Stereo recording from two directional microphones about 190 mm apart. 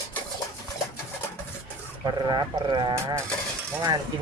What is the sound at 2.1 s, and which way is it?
Speech, 20° right (ahead or behind).